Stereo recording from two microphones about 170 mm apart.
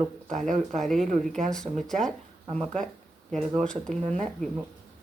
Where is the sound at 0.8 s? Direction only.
Centre (ahead or behind).